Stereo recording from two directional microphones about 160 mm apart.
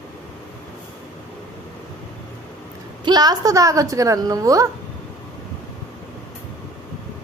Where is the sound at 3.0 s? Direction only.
25° right (ahead or behind).